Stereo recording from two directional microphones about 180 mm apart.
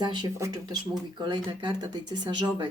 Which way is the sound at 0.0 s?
25° right (ahead or behind).